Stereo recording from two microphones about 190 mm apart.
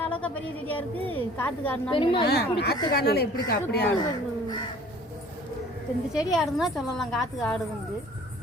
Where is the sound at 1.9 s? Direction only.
25° left (ahead or behind).